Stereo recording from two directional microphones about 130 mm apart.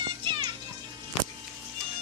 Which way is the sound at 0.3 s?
40° right (ahead or behind).